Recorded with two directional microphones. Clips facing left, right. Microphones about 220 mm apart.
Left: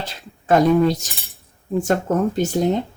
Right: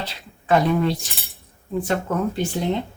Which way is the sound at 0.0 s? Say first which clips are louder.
Left 1 dB; 45° left (ahead or behind).